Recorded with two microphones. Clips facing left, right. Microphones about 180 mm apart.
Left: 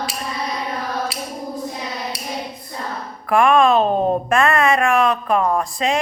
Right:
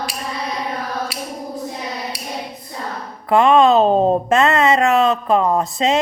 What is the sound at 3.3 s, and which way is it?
Speech, 25° right (ahead or behind).